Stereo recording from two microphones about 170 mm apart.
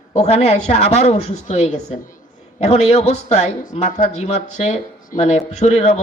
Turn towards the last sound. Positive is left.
turn(degrees=40)  # may be behind; listen again after turning